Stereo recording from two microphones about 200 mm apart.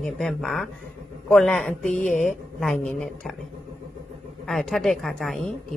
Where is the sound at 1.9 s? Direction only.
40° left (ahead or behind).